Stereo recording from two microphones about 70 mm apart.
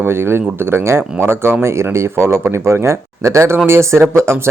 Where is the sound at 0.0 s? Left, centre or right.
Right.